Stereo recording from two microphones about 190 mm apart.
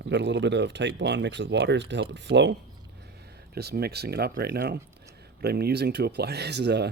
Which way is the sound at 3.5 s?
55° right (ahead or behind).